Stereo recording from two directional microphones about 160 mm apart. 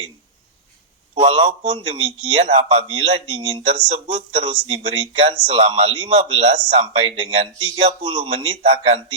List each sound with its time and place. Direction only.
1.2 s a man's voice: 45° right (ahead or behind)
1.6 s speech: 30° right (ahead or behind)